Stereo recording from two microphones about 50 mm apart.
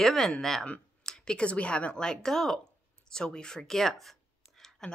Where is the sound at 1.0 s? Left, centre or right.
Centre.